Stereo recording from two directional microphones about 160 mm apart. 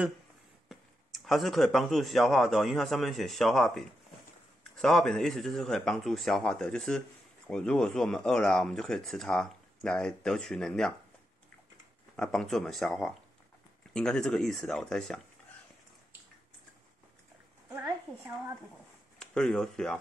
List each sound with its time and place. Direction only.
0.7 s speech: centre (ahead or behind)
12.2 s speech: 5° left (ahead or behind)
17.6 s a sound: 20° right (ahead or behind)
19.1 s speech: 5° left (ahead or behind)